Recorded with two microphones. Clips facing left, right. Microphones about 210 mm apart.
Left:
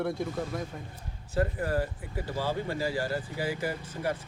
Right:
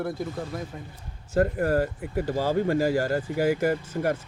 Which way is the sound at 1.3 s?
45° right (ahead or behind).